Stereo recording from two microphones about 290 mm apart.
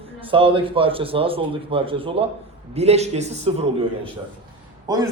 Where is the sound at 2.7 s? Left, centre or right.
Right.